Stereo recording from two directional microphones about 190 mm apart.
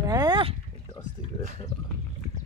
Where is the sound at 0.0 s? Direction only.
20° right (ahead or behind).